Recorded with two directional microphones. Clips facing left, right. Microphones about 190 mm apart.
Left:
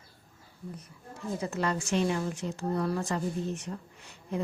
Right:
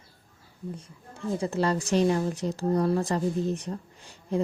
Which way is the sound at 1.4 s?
30° right (ahead or behind).